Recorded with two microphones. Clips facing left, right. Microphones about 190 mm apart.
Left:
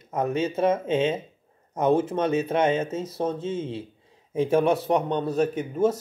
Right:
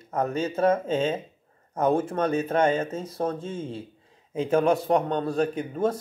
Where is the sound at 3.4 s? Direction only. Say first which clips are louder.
Left 4 dB; 25° left (ahead or behind).